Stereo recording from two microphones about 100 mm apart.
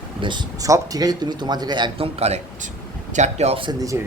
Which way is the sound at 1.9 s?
80° right.